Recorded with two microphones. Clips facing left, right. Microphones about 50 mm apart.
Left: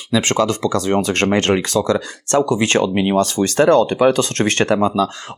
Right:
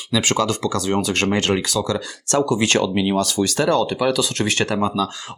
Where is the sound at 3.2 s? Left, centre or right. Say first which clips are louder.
Left 5 dB; left.